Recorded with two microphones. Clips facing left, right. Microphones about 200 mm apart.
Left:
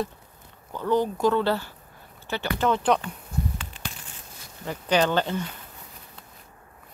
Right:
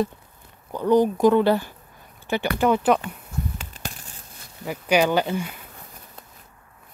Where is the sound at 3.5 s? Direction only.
40° right (ahead or behind).